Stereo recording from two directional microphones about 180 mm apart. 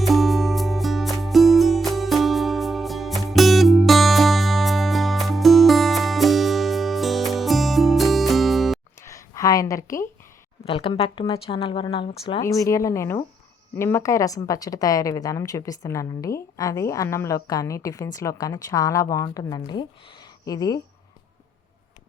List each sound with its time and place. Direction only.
0.0 s music: centre (ahead or behind)
9.0 s a sound: 15° left (ahead or behind)
10.7 s speech: 30° left (ahead or behind)
12.4 s a woman's voice: 15° left (ahead or behind)